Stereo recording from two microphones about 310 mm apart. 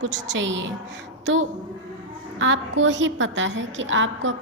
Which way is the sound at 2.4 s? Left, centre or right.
Right.